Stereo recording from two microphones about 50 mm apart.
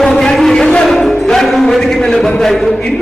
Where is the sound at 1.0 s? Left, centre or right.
Centre.